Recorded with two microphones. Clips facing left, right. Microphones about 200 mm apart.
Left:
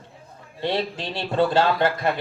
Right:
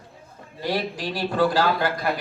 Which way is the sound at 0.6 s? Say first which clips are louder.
Left 1 dB; 25° left (ahead or behind).